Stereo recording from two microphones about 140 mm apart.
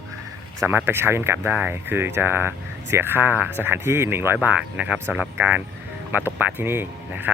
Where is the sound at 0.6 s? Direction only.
15° right (ahead or behind).